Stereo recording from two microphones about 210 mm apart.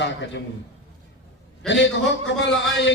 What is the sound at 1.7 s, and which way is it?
A man's voice, 60° left (ahead or behind).